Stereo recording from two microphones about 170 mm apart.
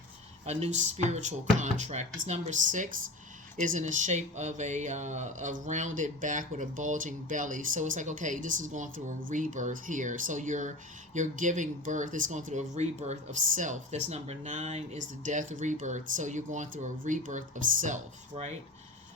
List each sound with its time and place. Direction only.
0.4 s speech: 40° right (ahead or behind)